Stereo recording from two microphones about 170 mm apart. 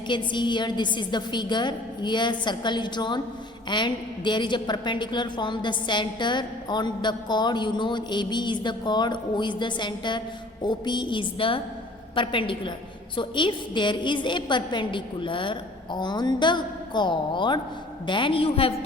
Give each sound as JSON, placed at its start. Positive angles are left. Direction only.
{"t": 0.1, "sound": "a woman's voice", "side_deg": 25}